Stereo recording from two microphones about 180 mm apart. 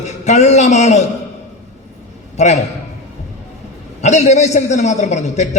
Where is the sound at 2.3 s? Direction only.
40° left (ahead or behind).